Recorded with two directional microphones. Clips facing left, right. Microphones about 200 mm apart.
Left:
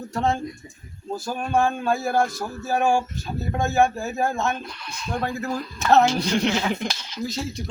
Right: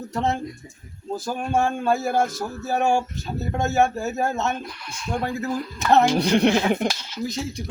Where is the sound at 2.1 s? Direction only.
20° right (ahead or behind).